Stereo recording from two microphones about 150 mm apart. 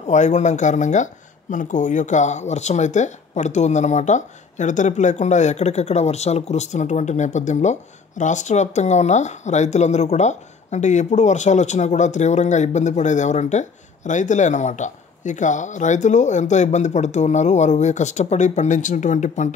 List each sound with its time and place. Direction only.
0.0 s speech: 50° left (ahead or behind)